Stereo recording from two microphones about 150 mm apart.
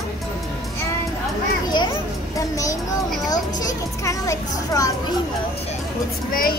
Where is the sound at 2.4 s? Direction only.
20° left (ahead or behind).